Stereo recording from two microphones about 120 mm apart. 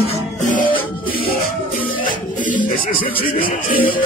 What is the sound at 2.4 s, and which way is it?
Music, 90° left.